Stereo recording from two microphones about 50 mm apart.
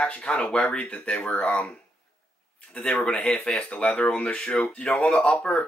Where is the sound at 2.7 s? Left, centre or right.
Centre.